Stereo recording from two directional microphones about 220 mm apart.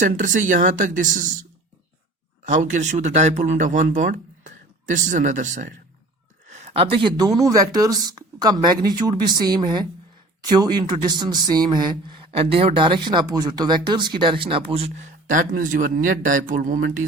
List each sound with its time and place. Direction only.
0.0 s speech: 35° right (ahead or behind)
2.5 s speech: 35° right (ahead or behind)